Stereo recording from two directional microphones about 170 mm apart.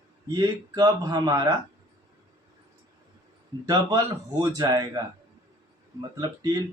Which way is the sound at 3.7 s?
20° right (ahead or behind).